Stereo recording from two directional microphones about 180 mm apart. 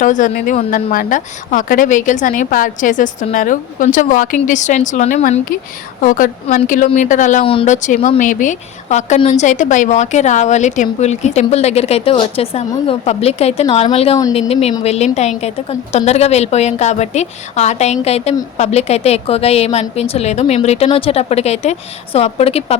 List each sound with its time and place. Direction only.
0.0 s a woman's voice: 45° left (ahead or behind)
7.4 s a woman's voice: 35° left (ahead or behind)